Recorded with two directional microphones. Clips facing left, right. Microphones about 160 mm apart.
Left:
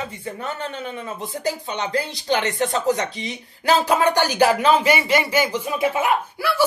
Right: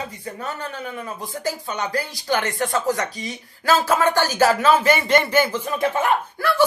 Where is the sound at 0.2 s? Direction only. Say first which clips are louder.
Left 1 dB; 25° left (ahead or behind).